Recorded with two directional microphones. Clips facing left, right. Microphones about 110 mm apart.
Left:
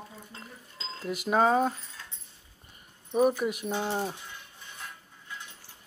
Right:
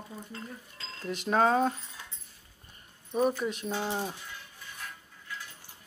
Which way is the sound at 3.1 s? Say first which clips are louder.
Left 3 dB; 10° left (ahead or behind).